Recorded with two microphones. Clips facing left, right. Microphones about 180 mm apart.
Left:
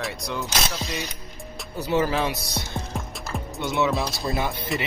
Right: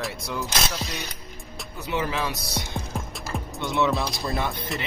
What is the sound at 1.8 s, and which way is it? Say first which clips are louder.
Speech: left 5 dB; 40° left (ahead or behind).